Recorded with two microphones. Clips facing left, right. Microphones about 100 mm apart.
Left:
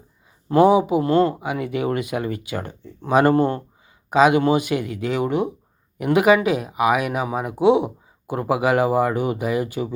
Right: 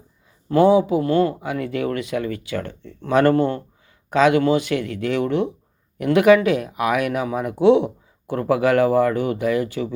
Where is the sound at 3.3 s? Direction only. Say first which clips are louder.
Left 1 dB; 40° left (ahead or behind).